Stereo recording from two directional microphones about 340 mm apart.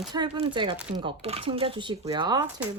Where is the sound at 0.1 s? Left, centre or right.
Centre.